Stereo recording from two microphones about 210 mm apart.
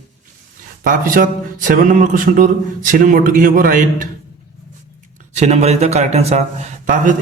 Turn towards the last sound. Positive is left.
turn(degrees=-35)  # may be behind; listen again after turning